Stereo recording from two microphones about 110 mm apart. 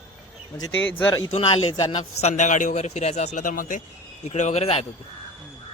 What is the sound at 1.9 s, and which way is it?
A man's voice, 75° left (ahead or behind).